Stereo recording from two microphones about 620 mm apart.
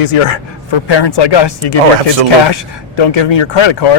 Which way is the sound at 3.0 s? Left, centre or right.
Left.